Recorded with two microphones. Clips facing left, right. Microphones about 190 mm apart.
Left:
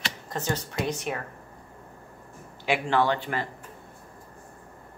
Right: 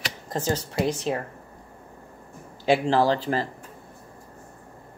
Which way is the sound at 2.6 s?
35° right (ahead or behind).